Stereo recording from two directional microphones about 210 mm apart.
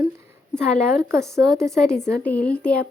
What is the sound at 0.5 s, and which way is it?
Speech, 5° left (ahead or behind).